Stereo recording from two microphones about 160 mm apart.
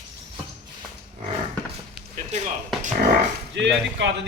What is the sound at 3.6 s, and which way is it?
Speech, 90° right.